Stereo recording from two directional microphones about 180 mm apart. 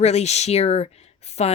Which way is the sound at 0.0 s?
35° left (ahead or behind).